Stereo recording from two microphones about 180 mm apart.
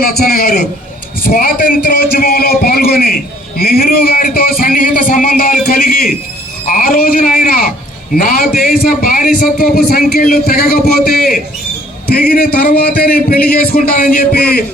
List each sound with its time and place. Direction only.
0.0 s a man's voice: 55° left (ahead or behind)